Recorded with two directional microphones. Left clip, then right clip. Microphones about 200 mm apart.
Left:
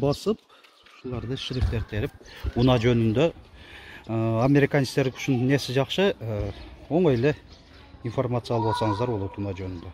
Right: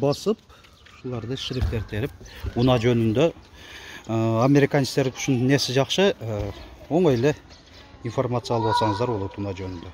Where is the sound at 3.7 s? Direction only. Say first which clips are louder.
Right 3 dB; 15° right (ahead or behind).